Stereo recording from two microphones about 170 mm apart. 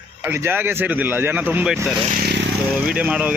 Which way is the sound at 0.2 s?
15° right (ahead or behind).